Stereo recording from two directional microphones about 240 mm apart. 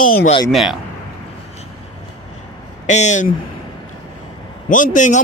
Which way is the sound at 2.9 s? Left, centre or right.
Left.